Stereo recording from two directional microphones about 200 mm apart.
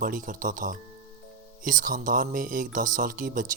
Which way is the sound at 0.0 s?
45° right (ahead or behind).